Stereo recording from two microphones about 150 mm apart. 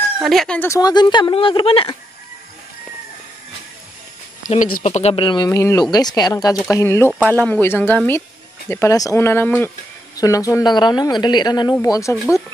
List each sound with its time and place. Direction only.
0.2 s speech: centre (ahead or behind)
0.6 s speech: 20° left (ahead or behind); by 1.9 s 35° left (ahead or behind)
4.8 s speech: 50° left (ahead or behind)
5.1 s speech: 30° left (ahead or behind)